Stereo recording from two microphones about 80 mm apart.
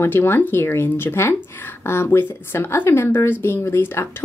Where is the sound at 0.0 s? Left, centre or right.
Left.